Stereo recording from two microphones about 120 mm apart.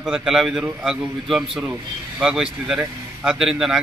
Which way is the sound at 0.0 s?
5° right (ahead or behind).